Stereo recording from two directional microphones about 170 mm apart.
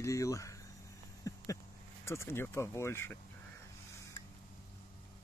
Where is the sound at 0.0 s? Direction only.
20° left (ahead or behind).